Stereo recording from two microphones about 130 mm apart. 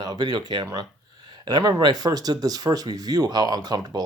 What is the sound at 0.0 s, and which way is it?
Speech, 35° right (ahead or behind).